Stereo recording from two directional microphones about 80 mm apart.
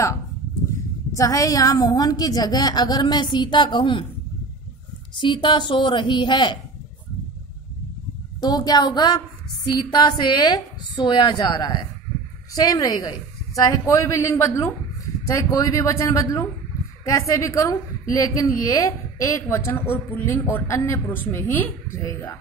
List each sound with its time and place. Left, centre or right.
1.1 s a woman's voice: left
5.2 s a woman's voice: left
8.4 s a woman's voice: left
12.5 s a woman's voice: left